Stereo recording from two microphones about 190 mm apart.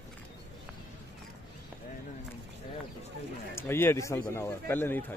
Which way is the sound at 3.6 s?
10° left (ahead or behind).